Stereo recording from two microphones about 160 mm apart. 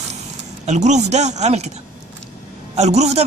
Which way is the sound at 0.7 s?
45° right (ahead or behind).